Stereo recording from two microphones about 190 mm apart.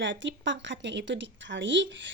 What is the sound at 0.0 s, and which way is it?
A woman's voice, 75° right (ahead or behind).